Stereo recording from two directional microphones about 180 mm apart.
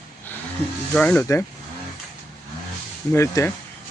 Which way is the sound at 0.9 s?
10° left (ahead or behind).